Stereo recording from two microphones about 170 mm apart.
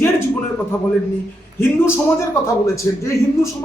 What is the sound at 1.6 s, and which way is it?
A man's voice, 15° left (ahead or behind).